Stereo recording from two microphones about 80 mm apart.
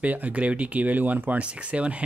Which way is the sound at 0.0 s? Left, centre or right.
Centre.